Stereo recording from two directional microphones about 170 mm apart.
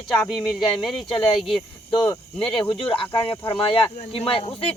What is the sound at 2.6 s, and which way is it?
Speech, 30° left (ahead or behind).